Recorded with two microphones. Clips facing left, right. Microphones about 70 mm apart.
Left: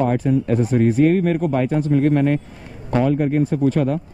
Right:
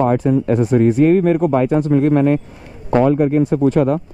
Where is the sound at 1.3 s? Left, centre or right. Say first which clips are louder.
Right 5 dB; right.